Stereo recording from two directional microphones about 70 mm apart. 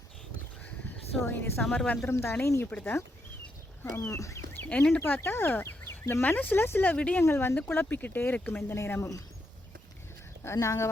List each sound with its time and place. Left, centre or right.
1.2 s speech: left
2.6 s speech: centre
3.9 s speech: left
4.5 s a sound: left
4.9 s speech: left
6.8 s speech: centre
7.2 s speech: left
7.7 s speech: left
8.6 s speech: left
10.4 s speech: left